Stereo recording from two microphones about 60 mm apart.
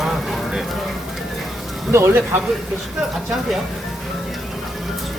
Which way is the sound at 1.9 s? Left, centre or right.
Right.